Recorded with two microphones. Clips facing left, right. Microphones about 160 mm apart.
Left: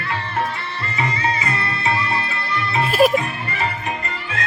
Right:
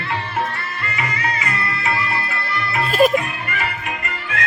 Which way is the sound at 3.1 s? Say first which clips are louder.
Even; 30° left (ahead or behind).